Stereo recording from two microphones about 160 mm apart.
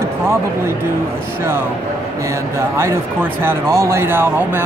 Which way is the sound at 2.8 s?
15° right (ahead or behind).